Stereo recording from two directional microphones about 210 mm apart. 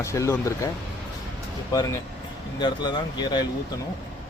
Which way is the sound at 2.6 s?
20° left (ahead or behind).